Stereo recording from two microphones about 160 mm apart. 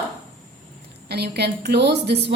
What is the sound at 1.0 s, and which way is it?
A woman's voice, 90° right.